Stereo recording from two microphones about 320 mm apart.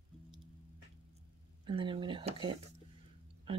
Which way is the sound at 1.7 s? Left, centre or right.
Centre.